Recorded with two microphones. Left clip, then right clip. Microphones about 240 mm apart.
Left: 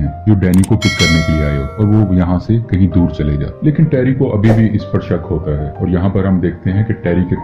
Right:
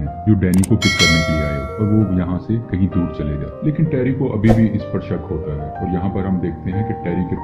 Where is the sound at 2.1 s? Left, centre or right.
Centre.